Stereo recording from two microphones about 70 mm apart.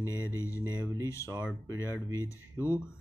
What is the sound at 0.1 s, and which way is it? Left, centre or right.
Speech, left.